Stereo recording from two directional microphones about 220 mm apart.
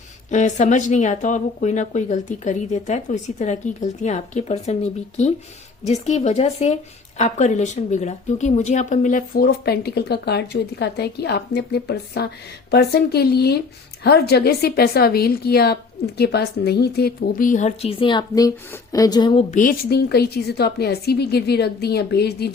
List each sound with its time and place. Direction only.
0.3 s a woman's voice: 35° left (ahead or behind)